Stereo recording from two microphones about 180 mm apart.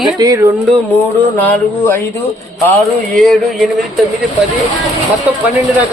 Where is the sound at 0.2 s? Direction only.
15° right (ahead or behind).